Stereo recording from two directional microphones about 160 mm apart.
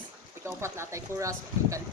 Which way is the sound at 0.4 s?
15° right (ahead or behind).